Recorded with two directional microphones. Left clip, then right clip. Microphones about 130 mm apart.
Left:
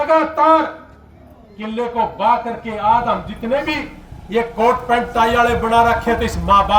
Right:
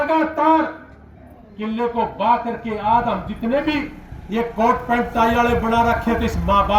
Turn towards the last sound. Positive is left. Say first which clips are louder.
# left 4 dB
turn(degrees=30)  # may be behind; listen again after turning